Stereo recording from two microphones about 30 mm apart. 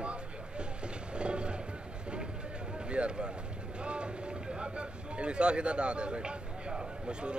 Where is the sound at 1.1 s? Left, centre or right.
Right.